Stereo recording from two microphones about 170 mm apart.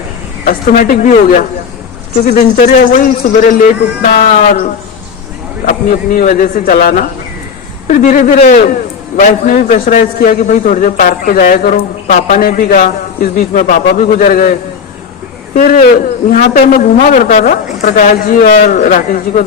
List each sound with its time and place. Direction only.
0.4 s a man's voice: 50° left (ahead or behind)
5.6 s a man's voice: 55° left (ahead or behind)
15.5 s a man's voice: 55° left (ahead or behind)